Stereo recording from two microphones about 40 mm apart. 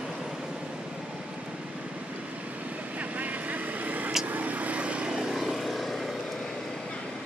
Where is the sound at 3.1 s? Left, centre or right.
Right.